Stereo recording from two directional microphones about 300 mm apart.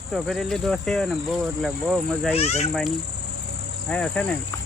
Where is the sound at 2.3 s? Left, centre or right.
Left.